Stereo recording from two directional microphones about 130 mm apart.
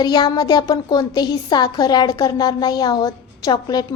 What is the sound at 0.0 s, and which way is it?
A woman's voice, 30° left (ahead or behind).